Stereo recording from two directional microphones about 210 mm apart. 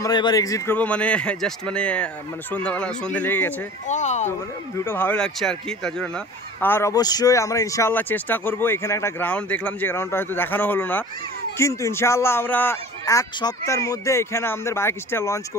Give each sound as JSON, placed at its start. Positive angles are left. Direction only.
{"t": 0.0, "sound": "speech", "side_deg": 20}
{"t": 3.8, "sound": "speech", "side_deg": 35}
{"t": 4.3, "sound": "speech", "side_deg": 10}